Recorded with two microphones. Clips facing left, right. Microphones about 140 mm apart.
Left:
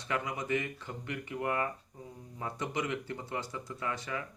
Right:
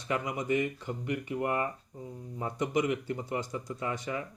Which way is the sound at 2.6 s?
15° right (ahead or behind).